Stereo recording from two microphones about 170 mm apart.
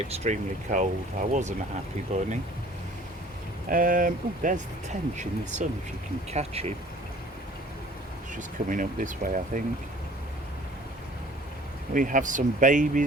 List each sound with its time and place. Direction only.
0.1 s speech: 45° right (ahead or behind)
3.7 s speech: 55° right (ahead or behind); by 6.7 s 40° right (ahead or behind)
8.4 s speech: 50° right (ahead or behind)
11.9 s speech: 50° right (ahead or behind)